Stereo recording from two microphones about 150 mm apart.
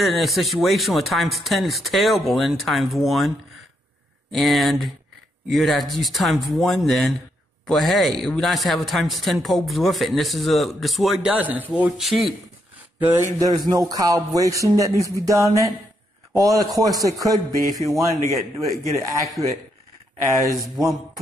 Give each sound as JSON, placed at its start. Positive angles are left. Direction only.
{"t": 0.0, "sound": "speech", "side_deg": 0}
{"t": 13.2, "sound": "speech", "side_deg": -25}
{"t": 17.6, "sound": "a man's voice", "side_deg": 20}
{"t": 19.4, "sound": "speech", "side_deg": -20}